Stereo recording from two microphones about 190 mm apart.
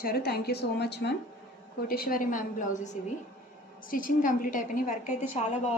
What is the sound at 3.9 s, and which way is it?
A woman's voice, 45° left (ahead or behind).